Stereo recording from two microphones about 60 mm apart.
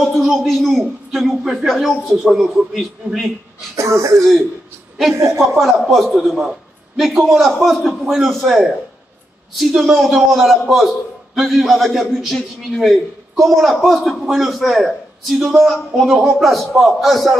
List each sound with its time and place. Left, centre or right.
0.0 s a man's voice: centre
3.7 s speech: right
5.6 s a man's voice: centre